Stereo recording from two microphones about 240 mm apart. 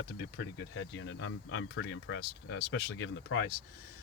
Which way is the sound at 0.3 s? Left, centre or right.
Left.